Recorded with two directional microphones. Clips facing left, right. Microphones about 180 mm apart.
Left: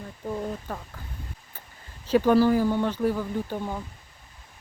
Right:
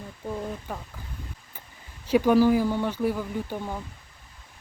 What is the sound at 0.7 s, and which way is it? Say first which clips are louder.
Speech: left 1 dB; 10° right (ahead or behind).